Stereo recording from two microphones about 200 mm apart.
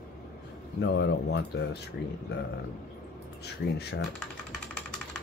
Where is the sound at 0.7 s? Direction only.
60° left (ahead or behind).